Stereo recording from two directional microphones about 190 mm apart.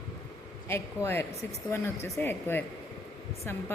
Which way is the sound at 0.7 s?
10° left (ahead or behind).